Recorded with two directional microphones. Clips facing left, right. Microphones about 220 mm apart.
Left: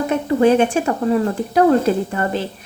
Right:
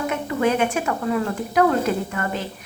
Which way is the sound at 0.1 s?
35° left (ahead or behind).